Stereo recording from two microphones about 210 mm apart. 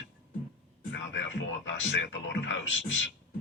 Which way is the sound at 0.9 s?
65° left (ahead or behind).